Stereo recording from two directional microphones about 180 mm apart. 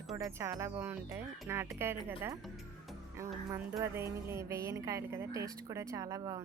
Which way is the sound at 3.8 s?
15° right (ahead or behind).